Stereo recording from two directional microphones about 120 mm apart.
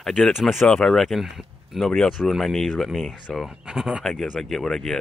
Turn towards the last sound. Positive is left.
turn(degrees=5)  # may be behind; listen again after turning